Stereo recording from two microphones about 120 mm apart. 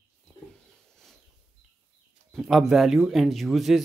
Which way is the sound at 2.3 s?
5° right (ahead or behind).